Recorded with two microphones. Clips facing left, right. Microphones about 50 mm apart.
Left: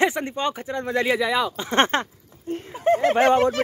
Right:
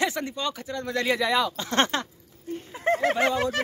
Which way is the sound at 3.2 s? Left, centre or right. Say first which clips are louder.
Left 7 dB; left.